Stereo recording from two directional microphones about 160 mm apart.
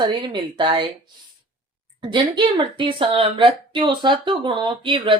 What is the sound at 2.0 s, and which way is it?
Speech, 30° right (ahead or behind).